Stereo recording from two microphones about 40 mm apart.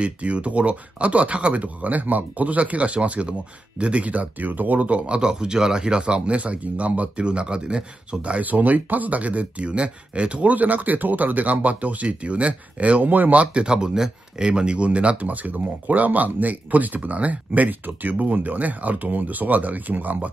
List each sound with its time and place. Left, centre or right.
0.0 s speech: right
13.0 s speech: right